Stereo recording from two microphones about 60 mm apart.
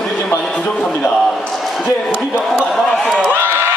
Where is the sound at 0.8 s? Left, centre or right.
Centre.